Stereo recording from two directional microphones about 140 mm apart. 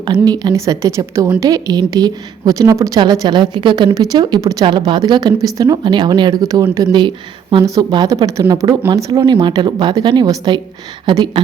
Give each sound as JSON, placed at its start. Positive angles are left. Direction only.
{"t": 0.0, "sound": "a woman's voice", "side_deg": -30}